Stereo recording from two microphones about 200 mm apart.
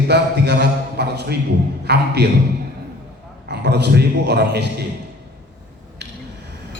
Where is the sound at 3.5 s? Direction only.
55° right (ahead or behind).